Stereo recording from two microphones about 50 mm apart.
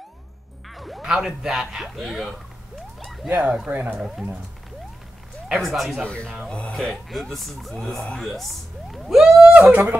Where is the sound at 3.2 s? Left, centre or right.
Right.